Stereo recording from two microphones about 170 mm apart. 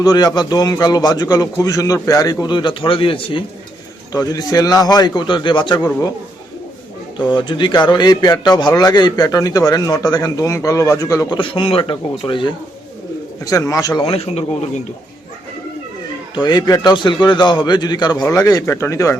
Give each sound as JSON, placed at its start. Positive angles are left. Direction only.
{"t": 0.0, "sound": "a man's voice", "side_deg": 25}
{"t": 4.1, "sound": "a man's voice", "side_deg": 20}
{"t": 7.2, "sound": "a man's voice", "side_deg": 25}
{"t": 14.0, "sound": "a man's voice", "side_deg": 35}
{"t": 16.3, "sound": "a man's voice", "side_deg": 25}